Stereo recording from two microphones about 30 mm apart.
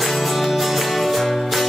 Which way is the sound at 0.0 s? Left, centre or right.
Centre.